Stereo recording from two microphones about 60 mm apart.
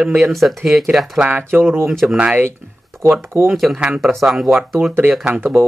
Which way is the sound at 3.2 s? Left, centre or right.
Right.